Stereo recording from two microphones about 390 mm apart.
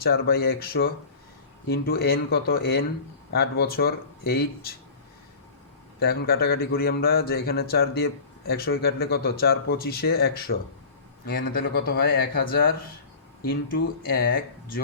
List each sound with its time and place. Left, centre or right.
0.0 s speech: left
6.0 s speech: left
14.1 s speech: left